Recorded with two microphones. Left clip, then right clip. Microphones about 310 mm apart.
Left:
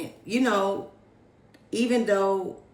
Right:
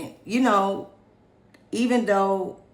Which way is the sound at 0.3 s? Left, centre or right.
Centre.